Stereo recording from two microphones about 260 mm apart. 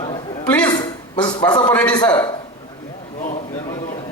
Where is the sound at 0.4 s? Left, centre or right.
Centre.